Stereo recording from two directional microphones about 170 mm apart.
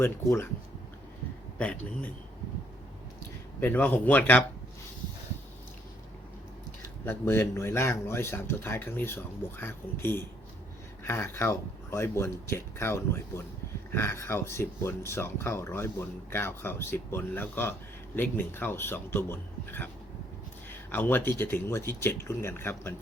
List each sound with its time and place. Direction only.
0.0 s speech: 15° left (ahead or behind)
1.5 s speech: 10° left (ahead or behind)
3.6 s speech: 10° left (ahead or behind)
7.0 s speech: 15° left (ahead or behind)